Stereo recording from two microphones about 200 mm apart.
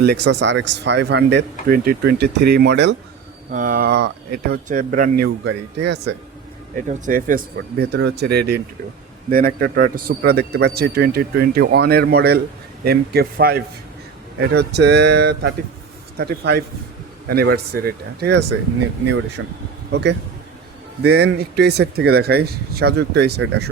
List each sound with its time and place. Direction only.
0.0 s speech: 55° right (ahead or behind)
3.5 s a man's voice: 45° right (ahead or behind); by 6.1 s 60° right (ahead or behind)
6.8 s a man's voice: 40° right (ahead or behind)
19.4 s speech: 70° right (ahead or behind)
19.9 s a man's voice: 60° right (ahead or behind)